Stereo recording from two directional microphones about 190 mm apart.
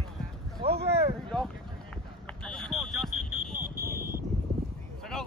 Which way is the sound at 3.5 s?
50° right (ahead or behind).